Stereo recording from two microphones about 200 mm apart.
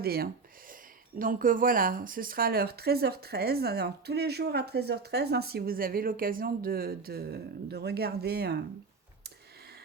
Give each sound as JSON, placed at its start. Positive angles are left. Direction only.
{"t": 0.0, "sound": "speech", "side_deg": -50}